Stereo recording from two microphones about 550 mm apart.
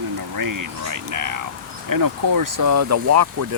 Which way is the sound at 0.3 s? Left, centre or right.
Right.